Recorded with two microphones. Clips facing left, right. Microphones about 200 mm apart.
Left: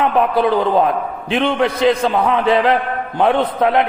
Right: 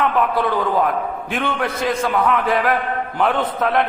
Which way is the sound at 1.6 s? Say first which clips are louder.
Left 7 dB; 20° left (ahead or behind).